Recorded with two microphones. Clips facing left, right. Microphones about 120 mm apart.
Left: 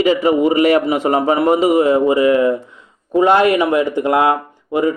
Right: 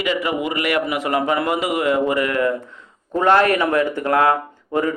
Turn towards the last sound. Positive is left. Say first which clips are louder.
# left 4 dB
turn(degrees=15)  # may be behind; listen again after turning